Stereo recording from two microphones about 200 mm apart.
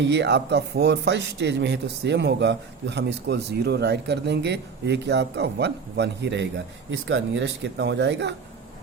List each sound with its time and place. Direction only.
0.0 s a man's voice: 60° right (ahead or behind)